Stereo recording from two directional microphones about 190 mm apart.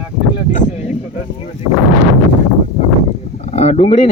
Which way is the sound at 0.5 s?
35° left (ahead or behind).